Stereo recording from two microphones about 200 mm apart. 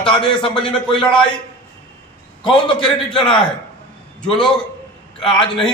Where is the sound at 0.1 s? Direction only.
25° left (ahead or behind).